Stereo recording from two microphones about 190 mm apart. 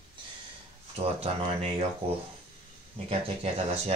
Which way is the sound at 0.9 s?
35° right (ahead or behind).